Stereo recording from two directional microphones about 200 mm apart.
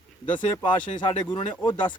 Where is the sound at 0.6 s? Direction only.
20° left (ahead or behind).